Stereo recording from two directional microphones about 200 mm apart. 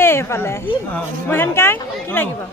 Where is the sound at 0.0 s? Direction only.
10° left (ahead or behind).